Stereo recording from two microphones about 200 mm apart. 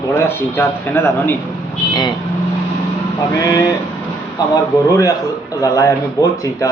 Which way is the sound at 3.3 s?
15° left (ahead or behind).